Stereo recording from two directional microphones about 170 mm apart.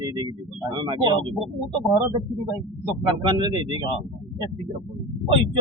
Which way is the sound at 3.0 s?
25° right (ahead or behind).